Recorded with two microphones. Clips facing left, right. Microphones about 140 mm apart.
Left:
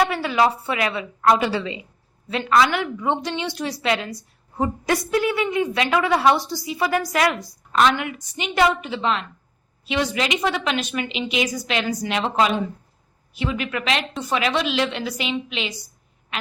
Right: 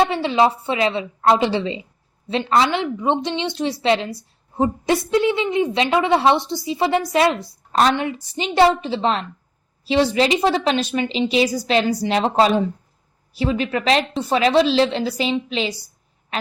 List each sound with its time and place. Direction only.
0.0 s a woman's voice: 25° right (ahead or behind)